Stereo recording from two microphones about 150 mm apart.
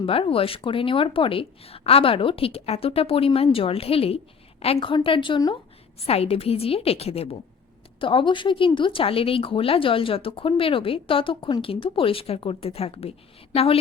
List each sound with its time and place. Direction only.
0.0 s speech: 35° left (ahead or behind)